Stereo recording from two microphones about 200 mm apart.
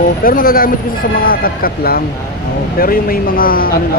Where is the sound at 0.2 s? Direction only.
45° left (ahead or behind).